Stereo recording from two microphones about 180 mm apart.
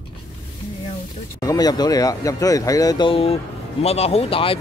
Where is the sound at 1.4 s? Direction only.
20° left (ahead or behind).